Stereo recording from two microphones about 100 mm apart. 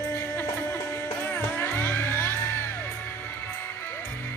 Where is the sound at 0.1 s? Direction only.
25° left (ahead or behind).